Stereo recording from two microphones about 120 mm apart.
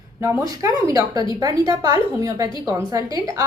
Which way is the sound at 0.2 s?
25° right (ahead or behind).